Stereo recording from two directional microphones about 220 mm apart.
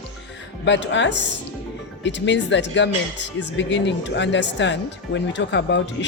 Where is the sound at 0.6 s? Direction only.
55° left (ahead or behind).